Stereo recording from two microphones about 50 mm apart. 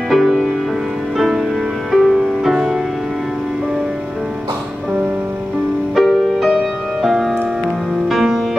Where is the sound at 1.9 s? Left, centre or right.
Centre.